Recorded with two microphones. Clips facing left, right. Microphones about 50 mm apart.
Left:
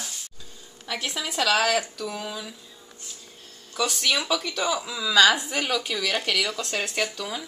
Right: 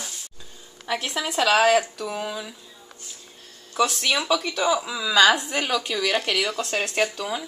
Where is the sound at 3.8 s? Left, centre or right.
Centre.